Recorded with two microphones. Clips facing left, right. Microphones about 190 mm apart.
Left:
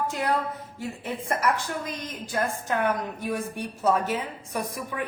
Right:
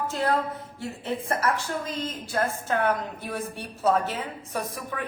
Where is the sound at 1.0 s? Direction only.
10° left (ahead or behind).